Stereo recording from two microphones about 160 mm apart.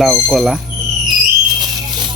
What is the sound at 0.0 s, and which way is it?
Speech, centre (ahead or behind).